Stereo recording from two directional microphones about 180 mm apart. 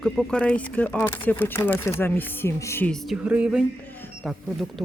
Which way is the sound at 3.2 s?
5° right (ahead or behind).